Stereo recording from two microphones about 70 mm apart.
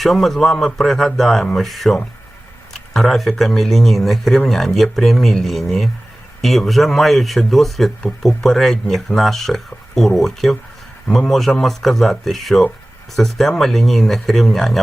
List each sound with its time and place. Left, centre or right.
0.0 s speech: centre